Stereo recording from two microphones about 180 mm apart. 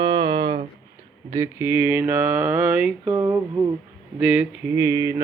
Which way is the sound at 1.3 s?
15° right (ahead or behind).